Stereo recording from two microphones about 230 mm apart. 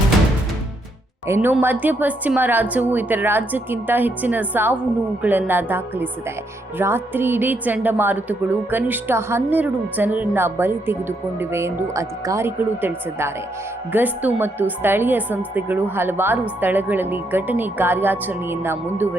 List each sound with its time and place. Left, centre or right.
1.3 s a woman's voice: centre